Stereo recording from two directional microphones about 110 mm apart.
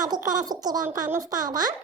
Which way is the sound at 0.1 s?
35° right (ahead or behind).